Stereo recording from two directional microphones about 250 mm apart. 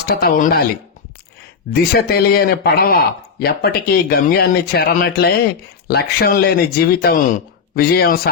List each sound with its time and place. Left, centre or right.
0.1 s a man's voice: left
1.7 s a man's voice: left